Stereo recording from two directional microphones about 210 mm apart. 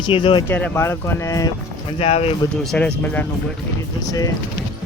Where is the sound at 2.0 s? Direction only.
30° left (ahead or behind).